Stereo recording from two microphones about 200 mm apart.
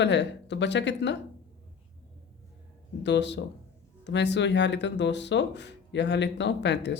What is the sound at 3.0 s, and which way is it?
Speech, 60° left (ahead or behind).